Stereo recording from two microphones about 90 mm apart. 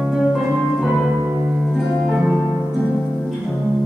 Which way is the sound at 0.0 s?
Centre (ahead or behind).